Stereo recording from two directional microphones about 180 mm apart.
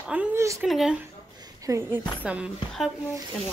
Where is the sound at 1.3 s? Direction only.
20° right (ahead or behind).